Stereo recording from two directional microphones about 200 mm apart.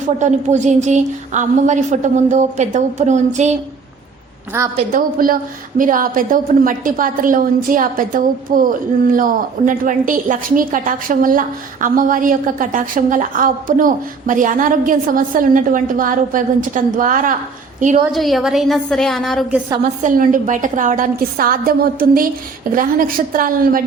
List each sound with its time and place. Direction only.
0.2 s a woman's voice: 35° right (ahead or behind)
4.5 s a woman's voice: 10° right (ahead or behind)
4.9 s a woman's voice: 45° right (ahead or behind)
18.1 s a woman's voice: centre (ahead or behind)
19.8 s a woman's voice: 40° right (ahead or behind)